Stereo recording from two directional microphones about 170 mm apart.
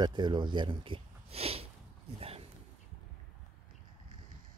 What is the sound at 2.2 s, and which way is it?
Dog, 35° right (ahead or behind).